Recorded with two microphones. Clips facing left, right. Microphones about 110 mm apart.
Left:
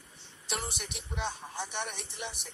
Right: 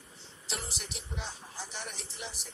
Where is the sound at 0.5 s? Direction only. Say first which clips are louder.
Left 4 dB; 60° left (ahead or behind).